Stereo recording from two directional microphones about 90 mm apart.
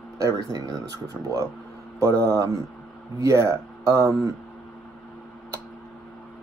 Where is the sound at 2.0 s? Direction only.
35° right (ahead or behind).